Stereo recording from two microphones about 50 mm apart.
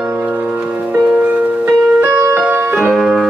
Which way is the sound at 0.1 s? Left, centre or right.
Right.